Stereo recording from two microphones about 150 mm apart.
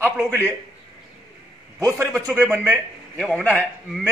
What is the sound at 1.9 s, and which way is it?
A man's voice, 10° right (ahead or behind).